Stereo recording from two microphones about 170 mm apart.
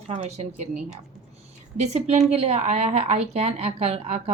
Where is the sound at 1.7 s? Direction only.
40° right (ahead or behind).